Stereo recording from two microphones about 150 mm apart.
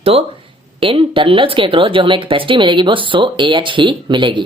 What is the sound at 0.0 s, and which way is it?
Speech, 40° right (ahead or behind).